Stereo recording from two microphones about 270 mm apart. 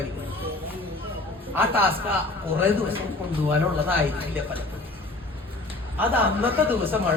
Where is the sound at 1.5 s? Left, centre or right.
Centre.